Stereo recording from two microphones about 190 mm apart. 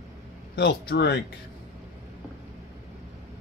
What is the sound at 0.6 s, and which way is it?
Speech, 60° left (ahead or behind).